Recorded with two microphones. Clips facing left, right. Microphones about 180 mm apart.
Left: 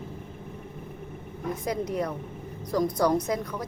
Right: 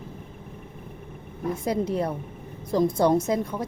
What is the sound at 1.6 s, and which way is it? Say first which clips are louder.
A woman's voice: right 3 dB; 30° right (ahead or behind).